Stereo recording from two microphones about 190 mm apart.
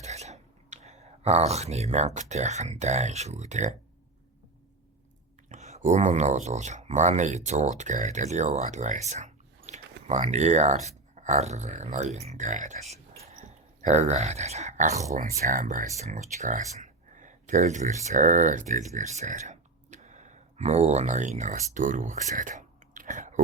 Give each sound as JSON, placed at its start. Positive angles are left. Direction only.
{"t": 0.0, "sound": "speech", "side_deg": -35}
{"t": 5.5, "sound": "speech", "side_deg": -35}
{"t": 12.9, "sound": "a sound", "side_deg": -35}
{"t": 13.8, "sound": "speech", "side_deg": -35}